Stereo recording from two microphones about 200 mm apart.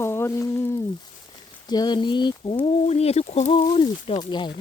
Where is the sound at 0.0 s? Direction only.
10° left (ahead or behind).